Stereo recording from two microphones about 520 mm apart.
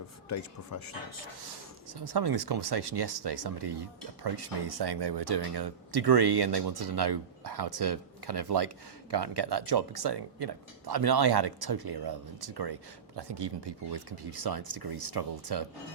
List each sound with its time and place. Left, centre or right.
1.9 s speech: right